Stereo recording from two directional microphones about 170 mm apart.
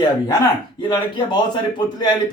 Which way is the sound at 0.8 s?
25° left (ahead or behind).